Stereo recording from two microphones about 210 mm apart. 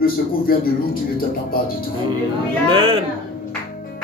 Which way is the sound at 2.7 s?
25° right (ahead or behind).